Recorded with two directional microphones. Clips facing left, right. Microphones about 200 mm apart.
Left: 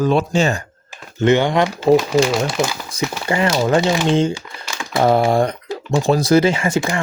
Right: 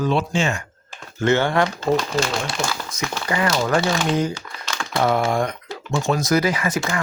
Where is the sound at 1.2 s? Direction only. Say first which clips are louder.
Left 4 dB; 15° left (ahead or behind).